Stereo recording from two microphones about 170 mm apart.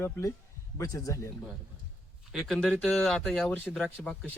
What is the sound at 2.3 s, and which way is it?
Speech, centre (ahead or behind).